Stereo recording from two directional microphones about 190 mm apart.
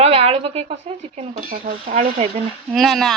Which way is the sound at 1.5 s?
45° right (ahead or behind).